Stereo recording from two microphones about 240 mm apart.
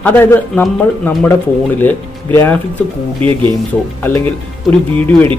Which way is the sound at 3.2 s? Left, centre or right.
Right.